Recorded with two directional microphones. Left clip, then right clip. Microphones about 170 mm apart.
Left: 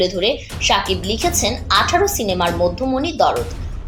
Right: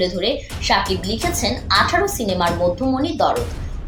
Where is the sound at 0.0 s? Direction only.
25° left (ahead or behind).